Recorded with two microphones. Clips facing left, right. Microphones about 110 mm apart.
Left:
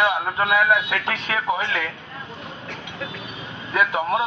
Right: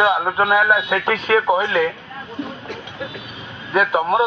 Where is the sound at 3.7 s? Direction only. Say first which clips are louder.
Right 4 dB; 25° right (ahead or behind).